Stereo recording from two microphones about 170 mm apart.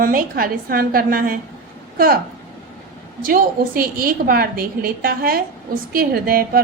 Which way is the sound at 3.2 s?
60° right (ahead or behind).